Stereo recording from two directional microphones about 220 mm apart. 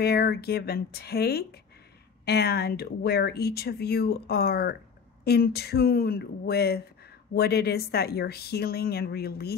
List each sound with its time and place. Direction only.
0.0 s speech: 45° left (ahead or behind)